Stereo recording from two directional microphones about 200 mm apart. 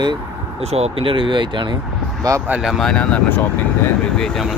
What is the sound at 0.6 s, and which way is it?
Speech, 30° right (ahead or behind).